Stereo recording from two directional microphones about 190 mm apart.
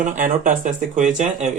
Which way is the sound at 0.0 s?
45° right (ahead or behind).